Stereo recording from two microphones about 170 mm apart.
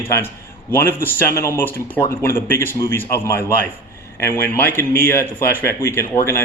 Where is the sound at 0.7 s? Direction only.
15° left (ahead or behind).